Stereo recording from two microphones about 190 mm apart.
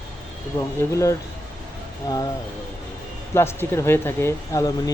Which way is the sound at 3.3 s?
15° left (ahead or behind).